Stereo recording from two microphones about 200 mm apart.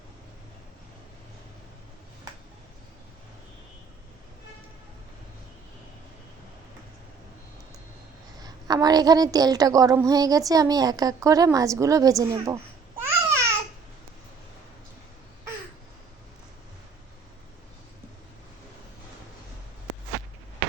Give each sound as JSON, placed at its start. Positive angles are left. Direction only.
{"t": 8.4, "sound": "a woman's voice", "side_deg": -20}
{"t": 13.0, "sound": "babbling", "side_deg": -15}